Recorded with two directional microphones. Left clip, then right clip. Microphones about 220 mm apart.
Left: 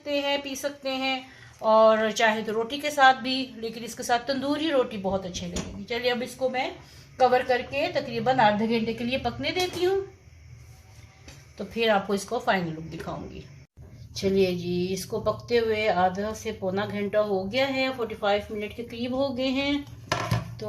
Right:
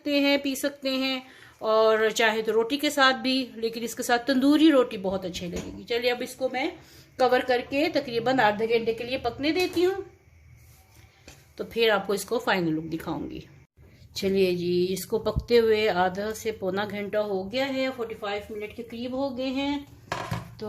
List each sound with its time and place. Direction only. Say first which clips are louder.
0.0 s a woman's voice: right 3 dB; 45° right (ahead or behind)
11.5 s a woman's voice: right 1 dB; 45° right (ahead or behind)
14.2 s speech: even; 35° right (ahead or behind); by 20.7 s 20° right (ahead or behind)